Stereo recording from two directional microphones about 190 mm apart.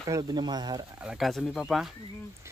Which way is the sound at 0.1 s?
20° right (ahead or behind).